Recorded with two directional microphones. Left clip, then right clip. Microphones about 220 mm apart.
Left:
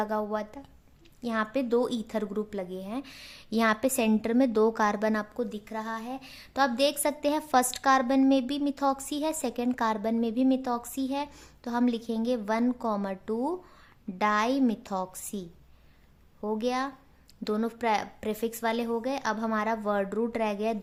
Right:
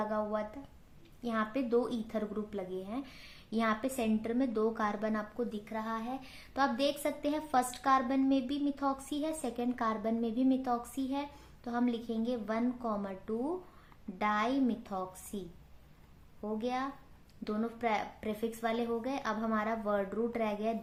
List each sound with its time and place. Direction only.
0.0 s a woman's voice: 40° left (ahead or behind)